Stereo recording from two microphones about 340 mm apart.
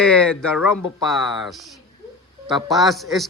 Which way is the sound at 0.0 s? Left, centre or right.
Centre.